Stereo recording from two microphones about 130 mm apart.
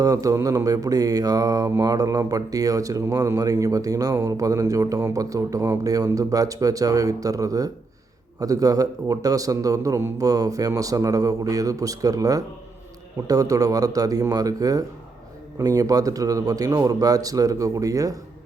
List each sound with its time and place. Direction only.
0.0 s speech: 25° right (ahead or behind)